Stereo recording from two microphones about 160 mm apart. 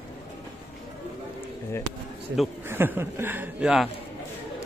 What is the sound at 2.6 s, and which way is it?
Speech, 15° right (ahead or behind).